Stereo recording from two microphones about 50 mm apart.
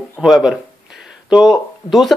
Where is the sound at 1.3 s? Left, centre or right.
Centre.